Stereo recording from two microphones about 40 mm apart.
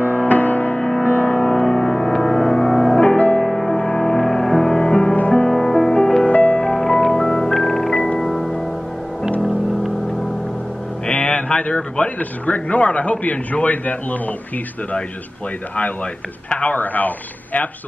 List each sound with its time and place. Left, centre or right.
0.0 s music: left
0.7 s music: left; by 3.0 s centre
3.0 s music: left
3.4 s music: centre
6.2 s music: left
6.6 s music: centre
7.5 s music: centre
11.1 s a man's voice: left
16.4 s speech: left